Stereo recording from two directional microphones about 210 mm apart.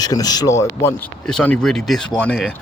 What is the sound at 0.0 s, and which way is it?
Speech, 20° left (ahead or behind).